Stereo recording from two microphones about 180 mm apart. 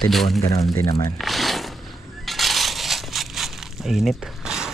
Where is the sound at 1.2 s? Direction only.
Centre (ahead or behind).